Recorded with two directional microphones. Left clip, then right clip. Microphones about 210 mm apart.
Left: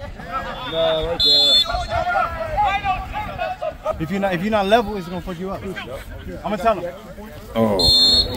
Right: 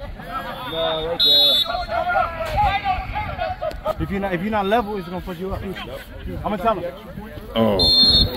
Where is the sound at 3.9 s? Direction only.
40° left (ahead or behind).